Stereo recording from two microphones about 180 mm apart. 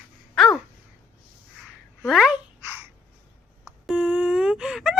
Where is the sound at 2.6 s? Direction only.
15° right (ahead or behind).